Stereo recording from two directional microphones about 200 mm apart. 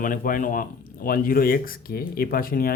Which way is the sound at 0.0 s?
45° left (ahead or behind).